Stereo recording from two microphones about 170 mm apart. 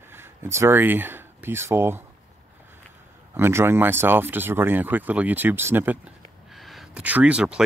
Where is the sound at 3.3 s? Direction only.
15° right (ahead or behind).